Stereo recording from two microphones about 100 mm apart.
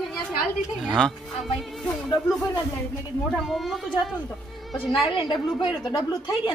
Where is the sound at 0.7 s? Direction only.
5° left (ahead or behind).